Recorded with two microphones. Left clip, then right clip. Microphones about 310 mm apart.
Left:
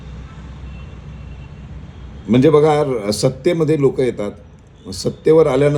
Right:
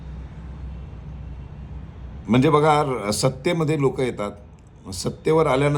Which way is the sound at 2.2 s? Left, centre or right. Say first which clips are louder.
Left 5 dB; centre.